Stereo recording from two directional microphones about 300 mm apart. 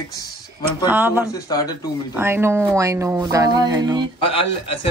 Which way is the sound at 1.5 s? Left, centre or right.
Centre.